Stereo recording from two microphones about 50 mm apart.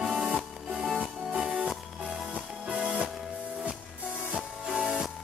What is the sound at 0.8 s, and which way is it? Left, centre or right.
Music, centre.